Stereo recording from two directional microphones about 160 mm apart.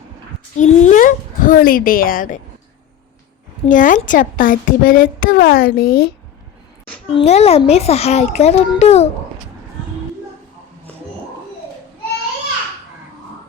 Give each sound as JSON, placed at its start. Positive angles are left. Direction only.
{"t": 0.5, "sound": "speech", "side_deg": 45}
{"t": 3.7, "sound": "speech", "side_deg": 55}
{"t": 7.1, "sound": "a child's voice", "side_deg": 40}